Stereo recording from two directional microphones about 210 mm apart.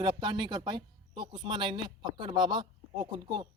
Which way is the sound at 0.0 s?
20° right (ahead or behind).